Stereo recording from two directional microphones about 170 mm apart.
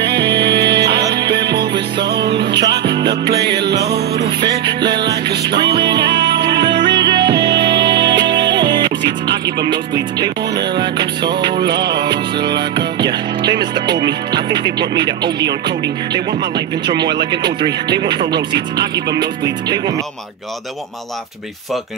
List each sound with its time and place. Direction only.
0.0 s music: 85° right
6.8 s music: 25° right (ahead or behind)
9.7 s speech: 25° right (ahead or behind)
11.5 s music: 80° right
12.0 s music: 25° right (ahead or behind)
12.4 s music: 75° right (ahead or behind)
13.0 s speech: 25° right (ahead or behind)